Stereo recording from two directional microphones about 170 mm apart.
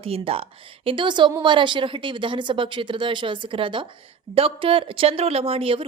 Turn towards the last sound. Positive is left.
turn(degrees=-35)  # may be behind; listen again after turning